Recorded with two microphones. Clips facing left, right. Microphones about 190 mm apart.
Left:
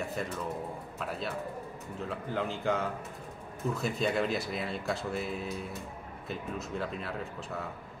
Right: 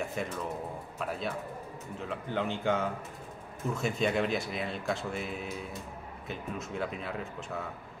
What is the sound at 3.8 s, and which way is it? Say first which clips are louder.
Speech: right 1 dB; centre (ahead or behind).